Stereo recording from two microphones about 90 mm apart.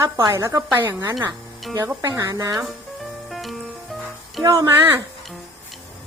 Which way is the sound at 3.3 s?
Centre (ahead or behind).